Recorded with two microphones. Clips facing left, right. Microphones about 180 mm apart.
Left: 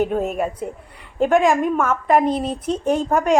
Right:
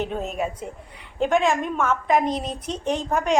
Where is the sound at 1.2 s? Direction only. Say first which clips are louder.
Left 5 dB; 10° left (ahead or behind).